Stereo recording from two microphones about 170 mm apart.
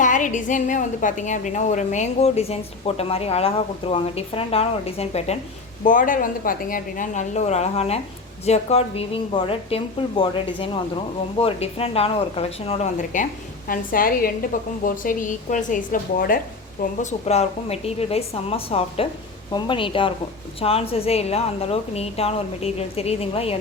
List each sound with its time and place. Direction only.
0.0 s a woman's voice: 50° left (ahead or behind)
5.8 s a woman's voice: 50° left (ahead or behind)
13.7 s a woman's voice: 55° left (ahead or behind)
17.0 s a woman's voice: 40° left (ahead or behind)